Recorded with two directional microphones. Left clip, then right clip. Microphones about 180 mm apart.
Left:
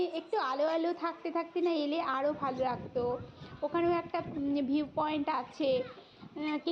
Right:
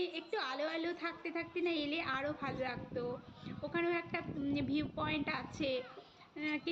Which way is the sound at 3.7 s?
10° left (ahead or behind).